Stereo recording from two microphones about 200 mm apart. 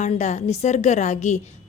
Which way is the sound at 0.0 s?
35° left (ahead or behind).